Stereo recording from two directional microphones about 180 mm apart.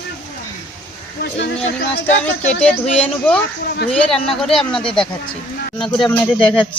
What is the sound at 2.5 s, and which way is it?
Speech, 5° left (ahead or behind).